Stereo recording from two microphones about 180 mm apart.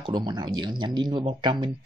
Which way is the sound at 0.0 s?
25° right (ahead or behind).